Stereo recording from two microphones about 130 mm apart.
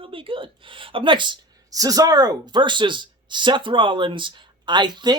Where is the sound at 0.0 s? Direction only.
40° right (ahead or behind).